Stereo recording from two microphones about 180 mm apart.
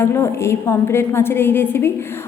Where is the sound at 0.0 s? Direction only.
15° left (ahead or behind).